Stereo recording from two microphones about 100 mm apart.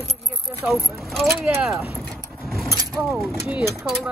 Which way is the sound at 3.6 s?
30° right (ahead or behind).